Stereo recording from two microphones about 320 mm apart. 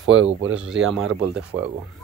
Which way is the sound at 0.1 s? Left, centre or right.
Right.